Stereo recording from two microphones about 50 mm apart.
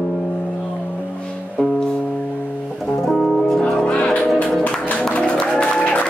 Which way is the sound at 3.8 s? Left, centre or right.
Left.